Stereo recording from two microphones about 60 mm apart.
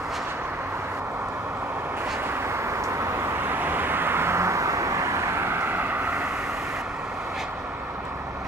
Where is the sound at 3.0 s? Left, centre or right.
Right.